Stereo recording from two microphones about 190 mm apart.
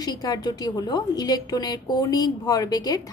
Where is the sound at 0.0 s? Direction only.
20° left (ahead or behind).